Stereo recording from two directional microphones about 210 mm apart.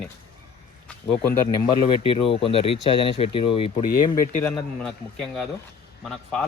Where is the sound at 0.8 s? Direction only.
10° left (ahead or behind).